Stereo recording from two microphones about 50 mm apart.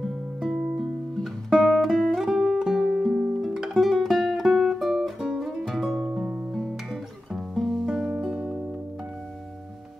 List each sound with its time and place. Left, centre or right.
0.4 s music: centre
6.1 s music: centre
7.3 s music: centre
7.8 s music: centre